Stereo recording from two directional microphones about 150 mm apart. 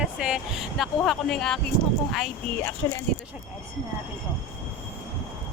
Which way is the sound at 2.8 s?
20° left (ahead or behind).